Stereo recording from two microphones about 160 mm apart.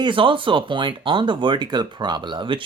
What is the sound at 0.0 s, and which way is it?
Speech, 30° right (ahead or behind).